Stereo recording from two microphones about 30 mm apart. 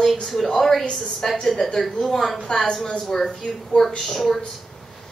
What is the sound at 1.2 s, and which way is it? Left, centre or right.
Speech, left.